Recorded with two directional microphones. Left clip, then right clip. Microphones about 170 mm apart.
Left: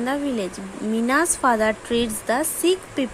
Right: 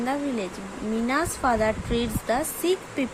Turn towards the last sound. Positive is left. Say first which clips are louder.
# left 4 dB
turn(degrees=20)  # may be behind; listen again after turning